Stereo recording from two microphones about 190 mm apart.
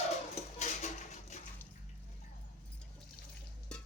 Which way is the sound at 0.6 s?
40° left (ahead or behind).